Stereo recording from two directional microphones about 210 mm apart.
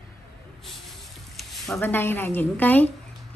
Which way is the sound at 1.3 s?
Centre (ahead or behind).